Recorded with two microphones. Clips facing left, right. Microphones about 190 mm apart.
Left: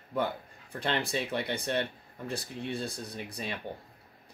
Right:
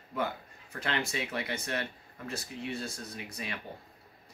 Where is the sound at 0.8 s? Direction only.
35° left (ahead or behind).